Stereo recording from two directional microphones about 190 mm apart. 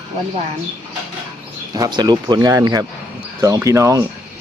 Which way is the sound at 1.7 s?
20° right (ahead or behind).